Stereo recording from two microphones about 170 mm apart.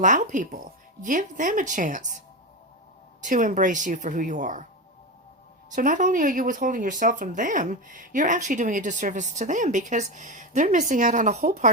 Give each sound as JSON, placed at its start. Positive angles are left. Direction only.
{"t": 0.0, "sound": "speech", "side_deg": -50}
{"t": 3.2, "sound": "speech", "side_deg": -50}
{"t": 5.7, "sound": "speech", "side_deg": -50}